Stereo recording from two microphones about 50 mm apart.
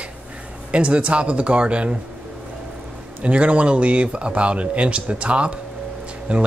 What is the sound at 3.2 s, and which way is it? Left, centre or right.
Speech, right.